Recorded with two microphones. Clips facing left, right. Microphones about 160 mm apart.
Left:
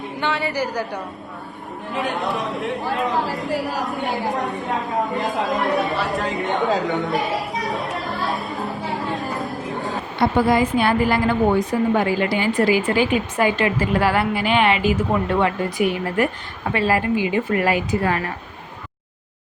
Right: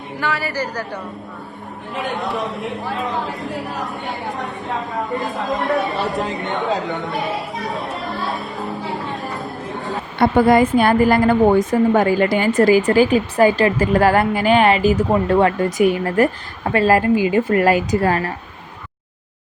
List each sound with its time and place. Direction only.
0.2 s a woman's voice: 20° left (ahead or behind)
0.6 s a woman's voice: 10° left (ahead or behind)
1.9 s speech: centre (ahead or behind)
10.2 s a woman's voice: 55° right (ahead or behind)